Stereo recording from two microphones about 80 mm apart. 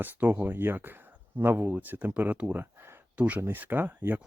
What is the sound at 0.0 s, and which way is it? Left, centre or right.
Speech, right.